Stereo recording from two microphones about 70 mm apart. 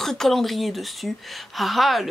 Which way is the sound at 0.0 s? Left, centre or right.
Centre.